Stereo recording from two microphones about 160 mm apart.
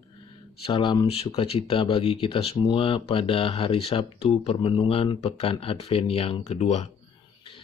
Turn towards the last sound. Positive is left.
turn(degrees=45)  # may be behind; listen again after turning